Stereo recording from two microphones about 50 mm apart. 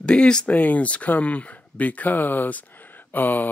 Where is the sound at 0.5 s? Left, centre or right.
Left.